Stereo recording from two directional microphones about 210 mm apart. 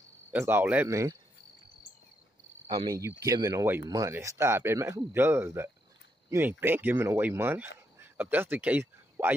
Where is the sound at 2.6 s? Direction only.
20° right (ahead or behind).